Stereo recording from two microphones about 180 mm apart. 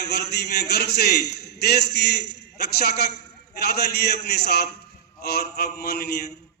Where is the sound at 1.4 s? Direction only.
65° left (ahead or behind).